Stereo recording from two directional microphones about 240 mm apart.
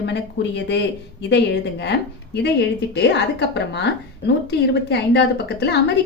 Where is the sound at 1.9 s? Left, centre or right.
Left.